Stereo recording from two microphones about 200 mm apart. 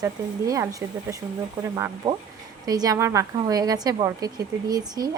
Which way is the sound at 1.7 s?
15° right (ahead or behind).